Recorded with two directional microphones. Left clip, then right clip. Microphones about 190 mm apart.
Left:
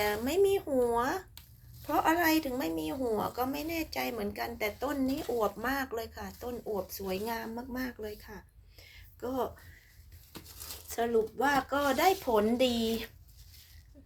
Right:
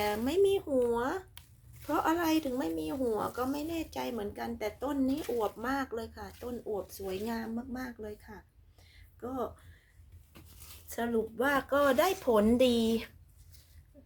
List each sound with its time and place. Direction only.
0.0 s a woman's voice: 15° right (ahead or behind)
10.8 s speech: 20° right (ahead or behind)